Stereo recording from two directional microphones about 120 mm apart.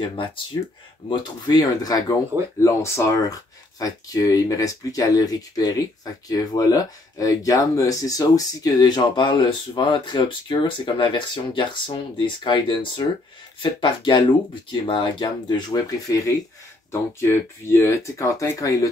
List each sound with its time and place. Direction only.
1.0 s speech: 40° left (ahead or behind)